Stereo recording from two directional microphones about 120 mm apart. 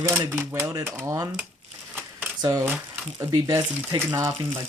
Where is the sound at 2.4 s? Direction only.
30° right (ahead or behind).